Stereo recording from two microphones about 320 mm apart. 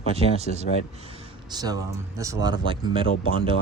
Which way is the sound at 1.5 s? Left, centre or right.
Centre.